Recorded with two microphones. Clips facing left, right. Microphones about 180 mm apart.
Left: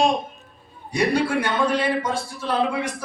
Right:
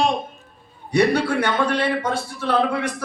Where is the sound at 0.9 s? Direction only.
65° right (ahead or behind).